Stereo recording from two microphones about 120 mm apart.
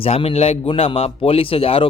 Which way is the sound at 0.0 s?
50° left (ahead or behind).